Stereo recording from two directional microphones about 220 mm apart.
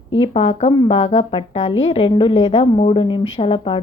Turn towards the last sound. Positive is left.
turn(degrees=20)  # may be behind; listen again after turning